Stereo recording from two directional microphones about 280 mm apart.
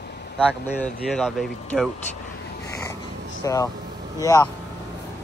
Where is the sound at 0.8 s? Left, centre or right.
Centre.